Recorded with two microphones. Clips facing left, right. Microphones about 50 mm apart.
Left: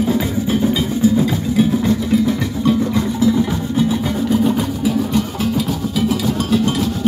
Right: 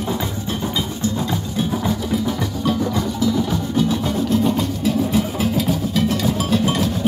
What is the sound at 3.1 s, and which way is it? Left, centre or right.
Music, left.